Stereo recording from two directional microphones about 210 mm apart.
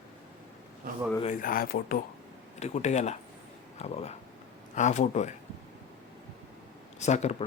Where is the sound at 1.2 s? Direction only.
40° left (ahead or behind).